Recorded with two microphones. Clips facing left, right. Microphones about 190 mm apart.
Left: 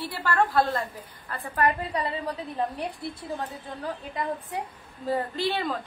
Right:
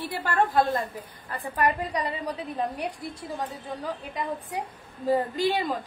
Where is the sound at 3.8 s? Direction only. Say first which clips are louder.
Left 2 dB; 15° right (ahead or behind).